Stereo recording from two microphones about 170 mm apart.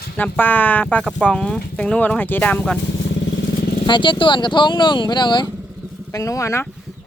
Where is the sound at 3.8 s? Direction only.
30° left (ahead or behind).